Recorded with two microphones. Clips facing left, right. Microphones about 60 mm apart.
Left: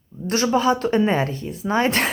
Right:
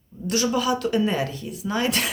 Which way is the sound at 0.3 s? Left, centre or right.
Left.